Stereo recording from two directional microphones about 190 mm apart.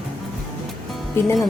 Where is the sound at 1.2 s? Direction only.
15° left (ahead or behind).